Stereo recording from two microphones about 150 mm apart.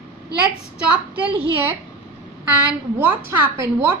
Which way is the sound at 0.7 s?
10° right (ahead or behind).